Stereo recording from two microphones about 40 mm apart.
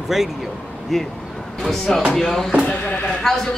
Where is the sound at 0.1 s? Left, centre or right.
Centre.